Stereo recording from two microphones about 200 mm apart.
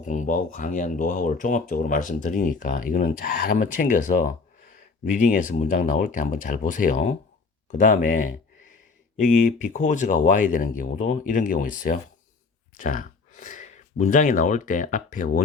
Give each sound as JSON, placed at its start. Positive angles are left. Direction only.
{"t": 0.0, "sound": "speech", "side_deg": 40}